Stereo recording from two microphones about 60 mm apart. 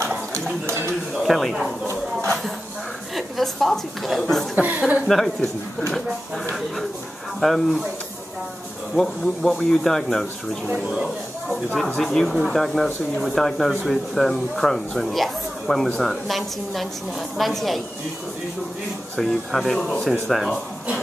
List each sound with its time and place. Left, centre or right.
0.3 s a sound: right
1.1 s speech: centre
3.2 s speech: centre
4.6 s speech: right
5.0 s speech: centre
8.9 s speech: centre
10.9 s speech: centre
11.7 s speech: centre
19.7 s speech: centre